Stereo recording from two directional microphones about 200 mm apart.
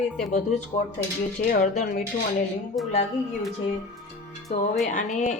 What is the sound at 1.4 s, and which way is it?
Speech, 40° left (ahead or behind).